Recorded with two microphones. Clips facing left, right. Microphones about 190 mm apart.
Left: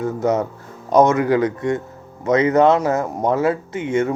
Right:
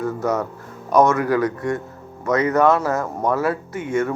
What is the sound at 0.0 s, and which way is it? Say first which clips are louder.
Speech: left 3 dB; 20° left (ahead or behind).